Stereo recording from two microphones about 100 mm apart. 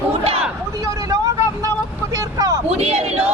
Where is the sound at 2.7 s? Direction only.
90° right.